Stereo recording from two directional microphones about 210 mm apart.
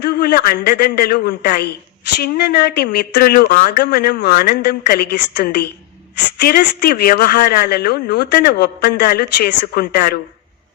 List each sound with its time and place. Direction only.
0.0 s a woman's voice: 50° left (ahead or behind)